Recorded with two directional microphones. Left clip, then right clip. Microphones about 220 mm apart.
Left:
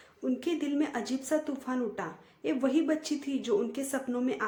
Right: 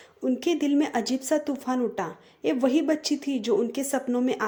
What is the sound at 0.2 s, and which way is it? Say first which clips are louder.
A woman's voice: right 6 dB; 25° right (ahead or behind).